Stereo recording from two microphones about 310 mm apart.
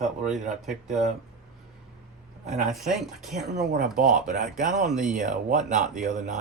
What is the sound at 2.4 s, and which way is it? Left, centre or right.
Speech, centre.